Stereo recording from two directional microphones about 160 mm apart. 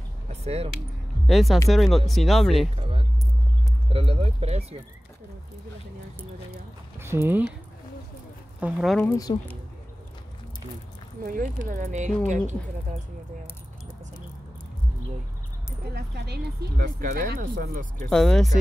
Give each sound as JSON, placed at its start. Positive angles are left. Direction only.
{"t": 0.3, "sound": "a sound", "side_deg": -40}
{"t": 1.2, "sound": "speech", "side_deg": 0}
{"t": 2.8, "sound": "keys jangling", "side_deg": -35}
{"t": 3.9, "sound": "speech", "side_deg": -35}
{"t": 7.0, "sound": "speech", "side_deg": -15}
{"t": 8.5, "sound": "speech", "side_deg": -5}
{"t": 9.3, "sound": "speech", "side_deg": 30}
{"t": 11.2, "sound": "speech", "side_deg": -55}
{"t": 15.9, "sound": "speech", "side_deg": -90}
{"t": 18.1, "sound": "speech", "side_deg": 5}